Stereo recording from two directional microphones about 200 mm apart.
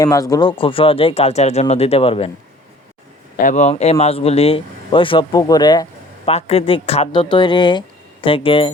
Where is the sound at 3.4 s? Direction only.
40° left (ahead or behind); by 5.8 s 20° left (ahead or behind).